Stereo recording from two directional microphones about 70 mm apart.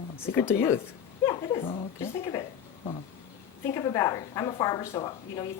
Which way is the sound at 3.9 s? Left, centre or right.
Left.